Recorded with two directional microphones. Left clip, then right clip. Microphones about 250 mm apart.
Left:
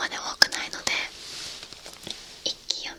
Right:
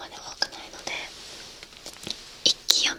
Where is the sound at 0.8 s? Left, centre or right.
Left.